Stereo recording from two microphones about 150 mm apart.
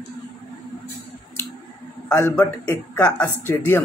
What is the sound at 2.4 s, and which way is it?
Speech, 10° left (ahead or behind).